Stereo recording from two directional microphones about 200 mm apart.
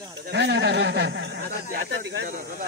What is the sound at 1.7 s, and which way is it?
Speech, 55° right (ahead or behind).